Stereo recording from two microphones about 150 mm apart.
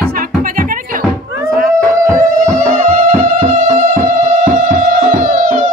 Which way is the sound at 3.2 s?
55° right (ahead or behind).